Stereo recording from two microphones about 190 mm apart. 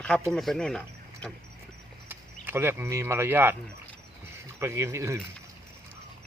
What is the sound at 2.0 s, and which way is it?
Speech, 10° right (ahead or behind).